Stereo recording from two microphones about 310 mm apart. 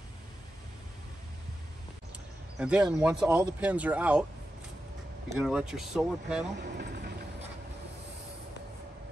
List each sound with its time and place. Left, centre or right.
2.6 s speech: centre
5.3 s speech: centre
6.5 s vehicle: right